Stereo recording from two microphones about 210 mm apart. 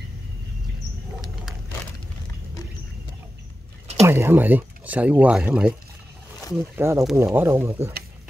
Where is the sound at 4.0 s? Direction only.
10° right (ahead or behind).